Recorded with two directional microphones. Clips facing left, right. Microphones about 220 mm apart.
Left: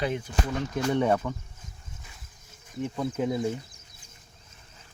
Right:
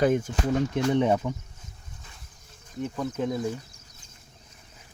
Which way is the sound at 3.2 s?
10° left (ahead or behind).